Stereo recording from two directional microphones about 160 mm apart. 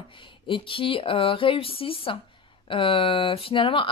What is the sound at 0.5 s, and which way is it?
Speech, 35° left (ahead or behind).